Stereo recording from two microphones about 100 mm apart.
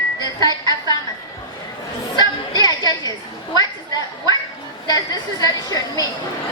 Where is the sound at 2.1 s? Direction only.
40° left (ahead or behind).